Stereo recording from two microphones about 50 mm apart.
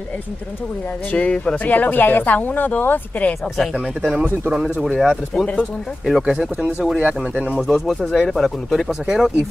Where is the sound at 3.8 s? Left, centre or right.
Right.